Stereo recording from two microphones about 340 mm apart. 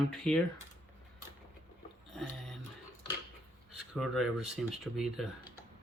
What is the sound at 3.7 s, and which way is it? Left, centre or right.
Speech, centre.